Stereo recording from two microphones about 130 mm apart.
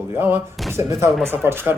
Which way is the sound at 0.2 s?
15° right (ahead or behind).